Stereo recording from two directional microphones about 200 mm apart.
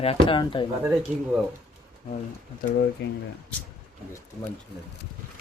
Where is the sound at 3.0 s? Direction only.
55° left (ahead or behind).